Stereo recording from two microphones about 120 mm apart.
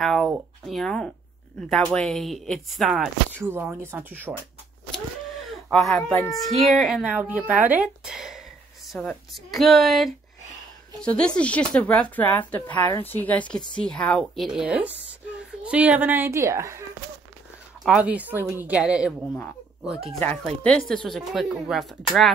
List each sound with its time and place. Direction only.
0.0 s speech: 5° left (ahead or behind)
3.4 s speech: 20° right (ahead or behind)
5.7 s speech: 5° left (ahead or behind)
6.1 s speech: 25° left (ahead or behind)
6.4 s speech: centre (ahead or behind); by 16.8 s 25° right (ahead or behind)
17.8 s speech: 10° right (ahead or behind)
20.2 s speech: 10° left (ahead or behind)